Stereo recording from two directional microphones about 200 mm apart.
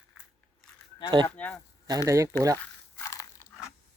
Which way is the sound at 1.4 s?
5° left (ahead or behind).